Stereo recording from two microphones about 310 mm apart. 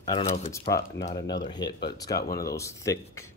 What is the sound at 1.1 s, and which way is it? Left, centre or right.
Speech, left.